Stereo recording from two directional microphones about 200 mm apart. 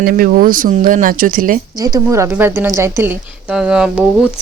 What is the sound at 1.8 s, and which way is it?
A woman's voice, 20° right (ahead or behind).